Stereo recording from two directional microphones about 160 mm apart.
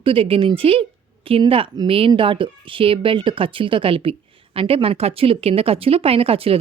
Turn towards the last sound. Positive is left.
turn(degrees=-35)  # may be behind; listen again after turning